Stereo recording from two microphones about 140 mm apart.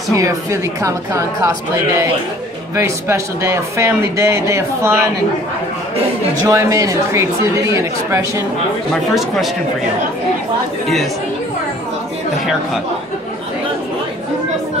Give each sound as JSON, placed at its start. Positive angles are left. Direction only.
{"t": 0.1, "sound": "speech", "side_deg": -25}
{"t": 6.4, "sound": "speech", "side_deg": -25}
{"t": 8.9, "sound": "speech", "side_deg": 0}